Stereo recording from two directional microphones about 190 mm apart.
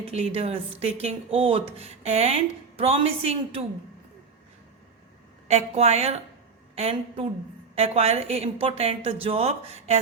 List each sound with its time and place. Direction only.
0.0 s speech: 30° right (ahead or behind)
5.5 s speech: 35° right (ahead or behind)